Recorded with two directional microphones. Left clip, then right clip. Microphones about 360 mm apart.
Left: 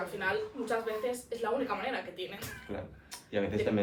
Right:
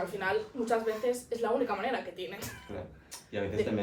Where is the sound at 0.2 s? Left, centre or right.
Right.